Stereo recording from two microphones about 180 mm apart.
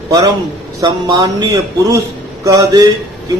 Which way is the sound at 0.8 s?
20° right (ahead or behind).